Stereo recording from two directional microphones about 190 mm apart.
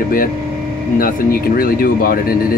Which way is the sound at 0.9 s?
50° left (ahead or behind).